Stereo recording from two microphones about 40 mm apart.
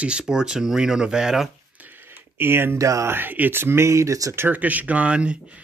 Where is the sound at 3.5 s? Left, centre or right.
Right.